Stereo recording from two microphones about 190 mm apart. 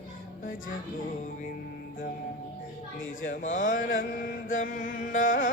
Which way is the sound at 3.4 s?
45° left (ahead or behind).